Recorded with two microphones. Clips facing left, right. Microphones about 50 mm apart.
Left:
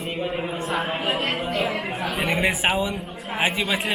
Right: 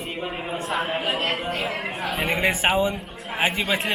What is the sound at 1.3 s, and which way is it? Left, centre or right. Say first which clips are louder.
Music: left 1 dB; right.